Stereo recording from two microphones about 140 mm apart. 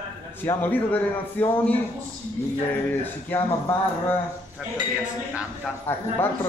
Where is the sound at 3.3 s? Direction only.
15° left (ahead or behind).